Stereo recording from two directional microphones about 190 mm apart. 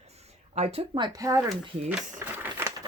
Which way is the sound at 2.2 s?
10° right (ahead or behind).